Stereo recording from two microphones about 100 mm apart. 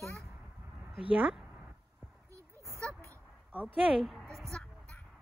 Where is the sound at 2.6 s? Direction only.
30° right (ahead or behind).